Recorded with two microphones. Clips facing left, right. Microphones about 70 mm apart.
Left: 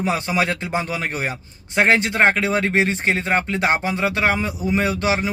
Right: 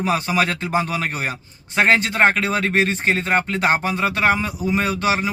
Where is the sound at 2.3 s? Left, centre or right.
Left.